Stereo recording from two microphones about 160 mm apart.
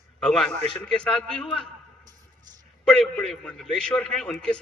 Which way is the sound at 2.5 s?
25° right (ahead or behind).